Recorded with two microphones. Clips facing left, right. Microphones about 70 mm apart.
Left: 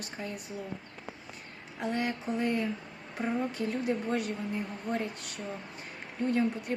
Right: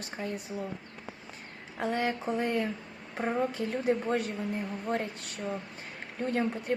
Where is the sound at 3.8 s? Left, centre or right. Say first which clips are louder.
Right 4 dB; right.